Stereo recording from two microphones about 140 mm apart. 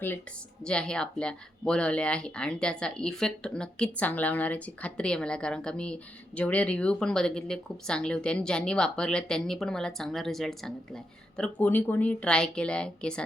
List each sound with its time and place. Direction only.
0.6 s speech: 5° left (ahead or behind)